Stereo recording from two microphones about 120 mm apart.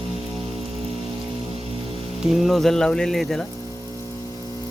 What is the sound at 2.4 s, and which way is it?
Speech, centre (ahead or behind).